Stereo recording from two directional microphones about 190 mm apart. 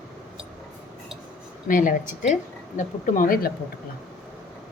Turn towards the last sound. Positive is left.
turn(degrees=45)  # may be behind; listen again after turning